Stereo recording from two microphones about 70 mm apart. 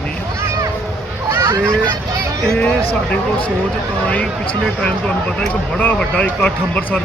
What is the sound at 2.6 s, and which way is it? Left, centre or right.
Speech, centre.